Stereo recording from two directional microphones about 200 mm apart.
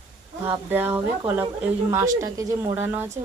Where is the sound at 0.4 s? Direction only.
10° right (ahead or behind).